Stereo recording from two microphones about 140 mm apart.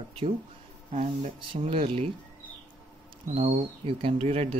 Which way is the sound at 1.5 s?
40° right (ahead or behind).